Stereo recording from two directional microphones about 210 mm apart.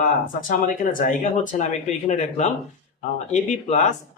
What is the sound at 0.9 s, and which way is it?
Speech, 35° left (ahead or behind).